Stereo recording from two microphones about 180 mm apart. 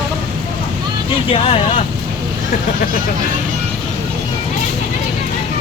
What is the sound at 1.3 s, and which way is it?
Speech, 35° left (ahead or behind).